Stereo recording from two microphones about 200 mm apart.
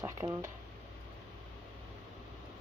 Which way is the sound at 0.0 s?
15° right (ahead or behind).